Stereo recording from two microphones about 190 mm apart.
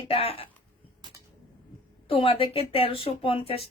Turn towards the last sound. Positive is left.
turn(degrees=30)  # may be behind; listen again after turning